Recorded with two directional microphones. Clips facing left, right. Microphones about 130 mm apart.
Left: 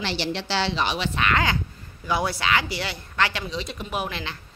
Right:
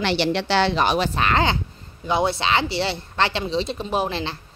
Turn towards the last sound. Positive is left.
turn(degrees=-30)  # may be behind; listen again after turning